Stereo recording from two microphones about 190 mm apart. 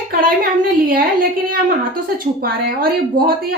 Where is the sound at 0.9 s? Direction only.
50° right (ahead or behind).